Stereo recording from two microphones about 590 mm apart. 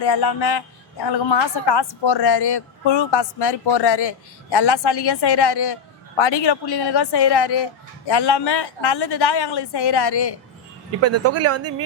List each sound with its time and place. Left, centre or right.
0.0 s a woman's voice: left
11.0 s speech: right